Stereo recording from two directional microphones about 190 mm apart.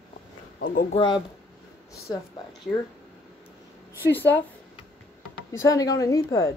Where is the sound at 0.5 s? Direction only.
50° left (ahead or behind).